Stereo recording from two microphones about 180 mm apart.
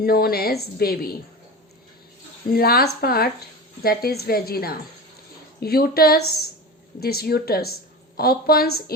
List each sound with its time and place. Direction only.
0.0 s a woman's voice: 55° left (ahead or behind)
2.5 s a woman's voice: 55° left (ahead or behind)